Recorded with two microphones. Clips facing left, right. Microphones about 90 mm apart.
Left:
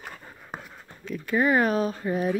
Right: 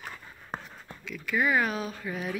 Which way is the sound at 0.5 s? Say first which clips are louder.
Right 1 dB; 5° left (ahead or behind).